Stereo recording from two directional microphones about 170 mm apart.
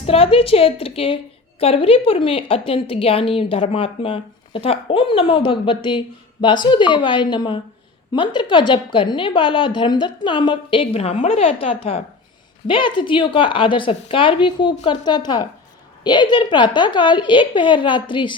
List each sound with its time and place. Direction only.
0.0 s a woman's voice: 35° left (ahead or behind)